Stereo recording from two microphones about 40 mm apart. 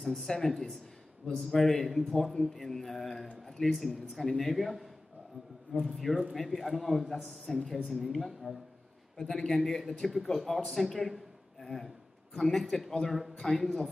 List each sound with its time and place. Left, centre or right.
0.0 s speech: centre
0.3 s mantra: centre
1.9 s a man's voice: centre
2.4 s mantra: centre
3.4 s a man's voice: centre
3.7 s a man's voice: centre
7.5 s mantra: centre
7.9 s a man's voice: centre